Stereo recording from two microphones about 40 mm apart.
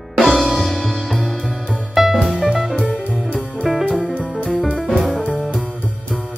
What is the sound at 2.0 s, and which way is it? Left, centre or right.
Music, centre.